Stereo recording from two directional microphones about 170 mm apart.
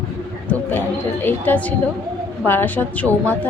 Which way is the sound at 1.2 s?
10° left (ahead or behind).